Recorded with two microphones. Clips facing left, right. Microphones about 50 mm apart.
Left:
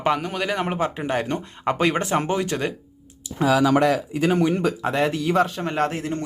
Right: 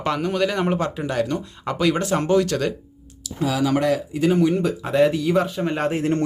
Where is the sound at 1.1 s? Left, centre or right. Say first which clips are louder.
Right 1 dB; left.